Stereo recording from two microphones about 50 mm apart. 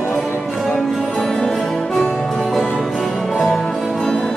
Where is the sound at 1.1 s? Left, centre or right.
Centre.